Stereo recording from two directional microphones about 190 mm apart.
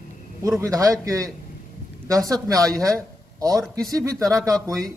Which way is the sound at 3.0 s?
20° right (ahead or behind).